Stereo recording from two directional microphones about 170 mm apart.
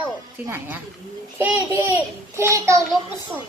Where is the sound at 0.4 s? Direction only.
10° right (ahead or behind).